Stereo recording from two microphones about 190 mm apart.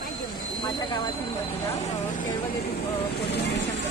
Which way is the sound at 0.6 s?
25° left (ahead or behind).